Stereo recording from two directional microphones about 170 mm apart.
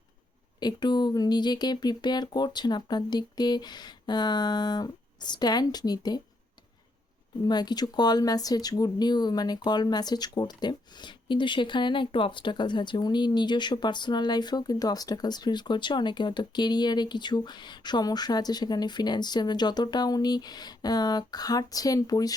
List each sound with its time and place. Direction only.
0.6 s speech: 25° left (ahead or behind)
7.4 s speech: 25° left (ahead or behind)